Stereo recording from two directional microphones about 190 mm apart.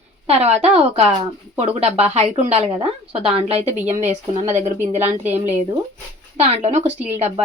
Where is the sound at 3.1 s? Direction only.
30° right (ahead or behind).